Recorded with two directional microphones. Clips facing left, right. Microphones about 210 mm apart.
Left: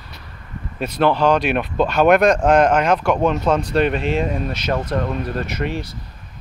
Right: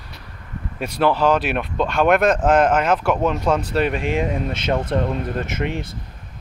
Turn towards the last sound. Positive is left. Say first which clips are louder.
# even
turn(degrees=-20)  # may be behind; listen again after turning